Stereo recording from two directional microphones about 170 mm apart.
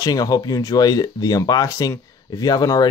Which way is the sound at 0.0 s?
20° left (ahead or behind).